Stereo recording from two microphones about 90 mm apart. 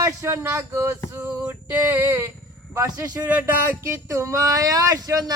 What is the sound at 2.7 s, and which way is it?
Speech, 35° right (ahead or behind).